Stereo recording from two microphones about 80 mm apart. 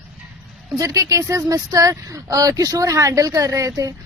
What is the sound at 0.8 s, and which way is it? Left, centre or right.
Speech, right.